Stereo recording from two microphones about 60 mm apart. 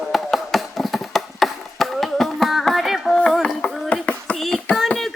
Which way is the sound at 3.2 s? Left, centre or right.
Centre.